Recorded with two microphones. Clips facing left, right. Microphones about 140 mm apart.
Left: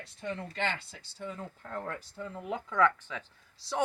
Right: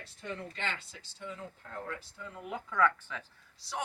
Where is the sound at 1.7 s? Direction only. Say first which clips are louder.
Left 4 dB; 50° left (ahead or behind).